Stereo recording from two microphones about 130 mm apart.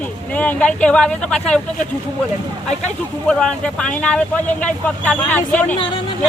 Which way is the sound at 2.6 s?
5° left (ahead or behind).